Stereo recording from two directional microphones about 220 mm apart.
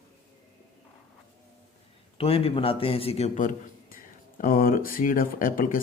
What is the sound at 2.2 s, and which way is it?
A man's voice, 25° left (ahead or behind).